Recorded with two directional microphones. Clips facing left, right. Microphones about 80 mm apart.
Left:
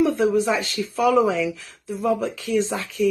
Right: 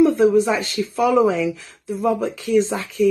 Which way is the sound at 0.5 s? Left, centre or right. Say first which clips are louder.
Right 2 dB; right.